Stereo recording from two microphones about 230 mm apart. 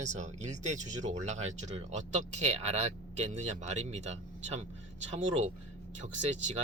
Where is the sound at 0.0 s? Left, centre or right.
Right.